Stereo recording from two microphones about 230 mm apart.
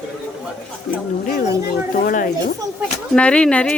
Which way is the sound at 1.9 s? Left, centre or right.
Left.